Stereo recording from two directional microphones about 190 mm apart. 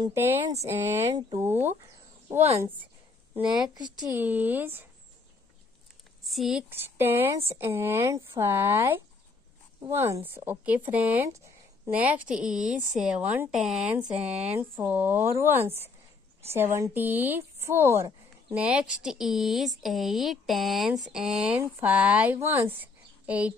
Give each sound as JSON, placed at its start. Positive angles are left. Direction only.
{"t": 0.0, "sound": "speech", "side_deg": -15}
{"t": 3.7, "sound": "speech", "side_deg": -20}
{"t": 4.1, "sound": "speech", "side_deg": -10}
{"t": 6.2, "sound": "speech", "side_deg": 0}
{"t": 12.6, "sound": "speech", "side_deg": -40}
{"t": 13.0, "sound": "speech", "side_deg": -5}
{"t": 22.7, "sound": "a sound", "side_deg": -10}